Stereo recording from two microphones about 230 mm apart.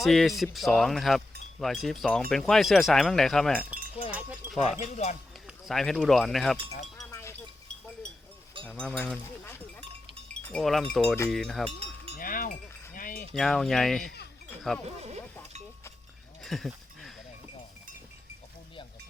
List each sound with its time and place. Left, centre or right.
0.0 s speech: centre
4.8 s speech: left
5.5 s speech: centre
7.1 s chink: centre
8.6 s speech: centre
12.1 s cowbell: left
13.3 s speech: centre
14.8 s speech: right
16.4 s a sound: centre